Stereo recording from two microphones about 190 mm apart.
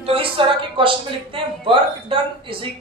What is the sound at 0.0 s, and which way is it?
A man's voice, 30° right (ahead or behind).